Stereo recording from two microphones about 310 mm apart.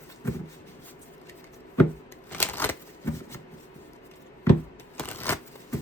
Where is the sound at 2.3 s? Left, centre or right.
Centre.